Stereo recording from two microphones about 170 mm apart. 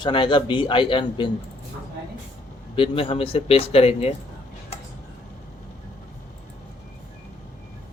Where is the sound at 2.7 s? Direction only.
35° left (ahead or behind).